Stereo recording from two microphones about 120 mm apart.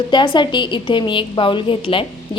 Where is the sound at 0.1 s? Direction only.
40° left (ahead or behind).